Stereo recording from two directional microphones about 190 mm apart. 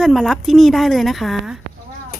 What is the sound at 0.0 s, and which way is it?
Speech, centre (ahead or behind).